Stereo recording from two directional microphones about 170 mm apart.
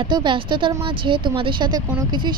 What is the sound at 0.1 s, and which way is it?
A woman's voice, 30° right (ahead or behind).